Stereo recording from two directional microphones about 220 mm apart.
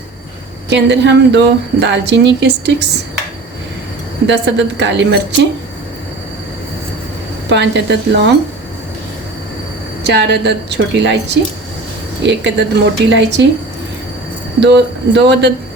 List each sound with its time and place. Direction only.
0.7 s a woman's voice: 50° right (ahead or behind)
4.3 s a woman's voice: 50° right (ahead or behind)
7.5 s a woman's voice: 50° right (ahead or behind)
10.0 s a woman's voice: 50° right (ahead or behind)
12.2 s a woman's voice: 50° right (ahead or behind)
14.6 s a woman's voice: 50° right (ahead or behind)